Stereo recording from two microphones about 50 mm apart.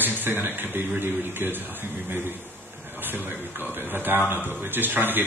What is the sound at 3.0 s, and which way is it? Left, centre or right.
A man's voice, right.